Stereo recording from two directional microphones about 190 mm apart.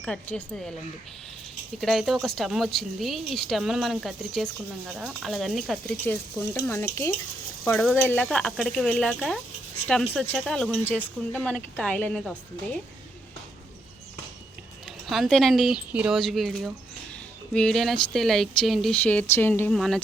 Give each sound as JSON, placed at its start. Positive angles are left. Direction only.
{"t": 0.0, "sound": "speech", "side_deg": 5}
{"t": 1.8, "sound": "speech", "side_deg": 0}
{"t": 6.1, "sound": "stir", "side_deg": 10}
{"t": 7.6, "sound": "speech", "side_deg": 10}
{"t": 14.8, "sound": "speech", "side_deg": 0}